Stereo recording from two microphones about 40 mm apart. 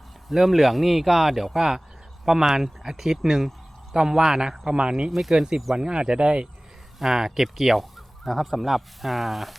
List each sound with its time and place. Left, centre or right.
0.3 s speech: centre; by 5.1 s right
5.1 s speech: centre
7.0 s speech: centre